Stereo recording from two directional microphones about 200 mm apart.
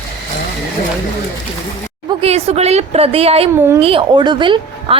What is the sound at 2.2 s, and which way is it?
A woman's voice, 30° right (ahead or behind).